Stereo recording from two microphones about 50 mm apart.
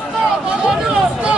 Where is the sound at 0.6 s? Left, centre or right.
Centre.